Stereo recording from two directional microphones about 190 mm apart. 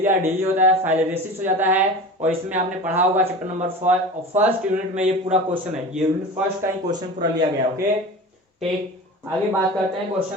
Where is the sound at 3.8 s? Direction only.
40° right (ahead or behind).